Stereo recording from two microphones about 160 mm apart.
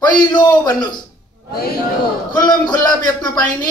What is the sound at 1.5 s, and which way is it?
Speech, 75° left (ahead or behind).